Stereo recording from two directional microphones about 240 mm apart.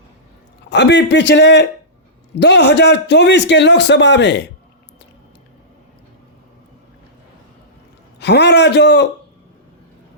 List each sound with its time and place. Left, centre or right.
0.7 s a man's voice: left
8.2 s a man's voice: left